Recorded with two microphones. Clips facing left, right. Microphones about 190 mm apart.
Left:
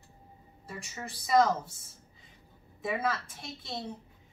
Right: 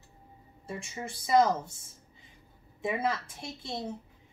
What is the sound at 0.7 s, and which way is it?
Speech, 25° right (ahead or behind).